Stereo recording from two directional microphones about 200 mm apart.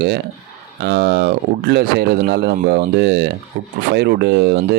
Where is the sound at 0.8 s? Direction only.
55° right (ahead or behind).